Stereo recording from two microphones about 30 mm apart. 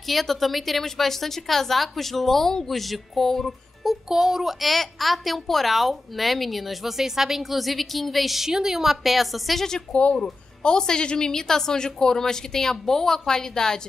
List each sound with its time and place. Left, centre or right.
0.0 s a woman's voice: centre
4.1 s speech: centre
4.6 s a woman's voice: centre
8.5 s speech: centre
9.0 s a woman's voice: centre
9.9 s speech: left
10.6 s a woman's voice: left